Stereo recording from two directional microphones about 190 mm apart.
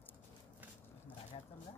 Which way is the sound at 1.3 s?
30° left (ahead or behind).